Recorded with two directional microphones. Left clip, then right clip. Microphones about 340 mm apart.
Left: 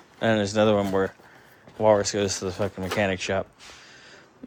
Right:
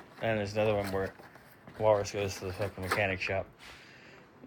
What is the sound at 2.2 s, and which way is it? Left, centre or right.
Speech, left.